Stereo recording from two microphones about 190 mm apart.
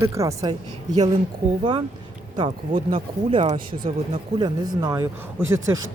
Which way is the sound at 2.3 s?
25° right (ahead or behind).